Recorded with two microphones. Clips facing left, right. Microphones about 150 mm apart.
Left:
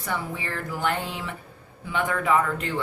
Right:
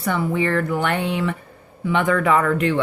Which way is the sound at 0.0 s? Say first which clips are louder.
Right 10 dB; 70° right (ahead or behind).